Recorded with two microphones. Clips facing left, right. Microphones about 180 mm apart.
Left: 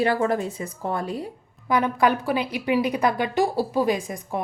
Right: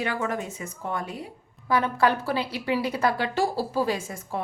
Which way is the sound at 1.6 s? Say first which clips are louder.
Left 2 dB; 15° left (ahead or behind).